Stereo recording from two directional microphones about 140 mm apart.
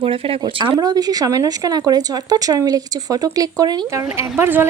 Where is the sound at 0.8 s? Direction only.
30° right (ahead or behind).